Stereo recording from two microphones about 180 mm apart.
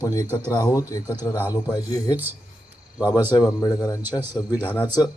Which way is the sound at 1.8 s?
20° left (ahead or behind).